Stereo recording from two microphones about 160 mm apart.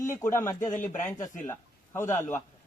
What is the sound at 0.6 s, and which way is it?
Speech, 50° left (ahead or behind).